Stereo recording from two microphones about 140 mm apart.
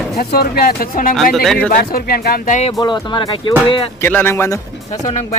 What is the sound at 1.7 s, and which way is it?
Speech, 90° left.